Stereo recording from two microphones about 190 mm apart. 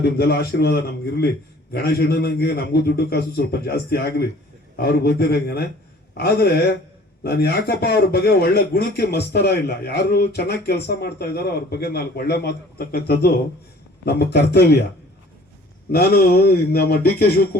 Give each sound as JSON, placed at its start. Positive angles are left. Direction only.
{"t": 0.0, "sound": "a man's voice", "side_deg": 55}
{"t": 15.9, "sound": "a man's voice", "side_deg": 55}